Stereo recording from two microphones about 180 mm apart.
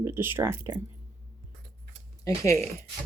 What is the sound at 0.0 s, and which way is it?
Speech, 15° right (ahead or behind).